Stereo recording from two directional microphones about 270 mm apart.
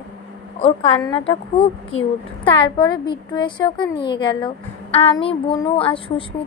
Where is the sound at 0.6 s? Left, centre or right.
Left.